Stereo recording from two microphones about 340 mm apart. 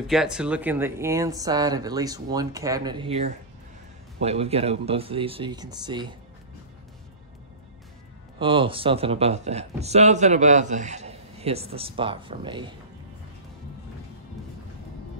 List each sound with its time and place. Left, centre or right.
0.0 s speech: centre
8.4 s speech: centre